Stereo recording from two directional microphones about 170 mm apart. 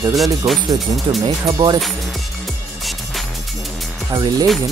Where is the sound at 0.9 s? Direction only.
20° right (ahead or behind).